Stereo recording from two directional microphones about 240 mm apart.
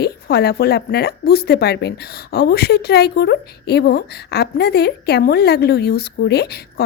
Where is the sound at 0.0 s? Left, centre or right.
Left.